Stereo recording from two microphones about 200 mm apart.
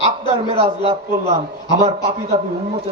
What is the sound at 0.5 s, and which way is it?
Speech, 25° right (ahead or behind).